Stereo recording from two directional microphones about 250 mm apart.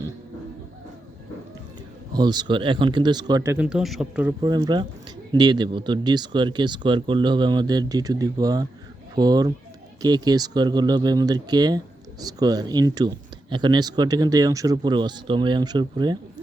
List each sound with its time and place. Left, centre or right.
2.1 s speech: centre
4.4 s speech: centre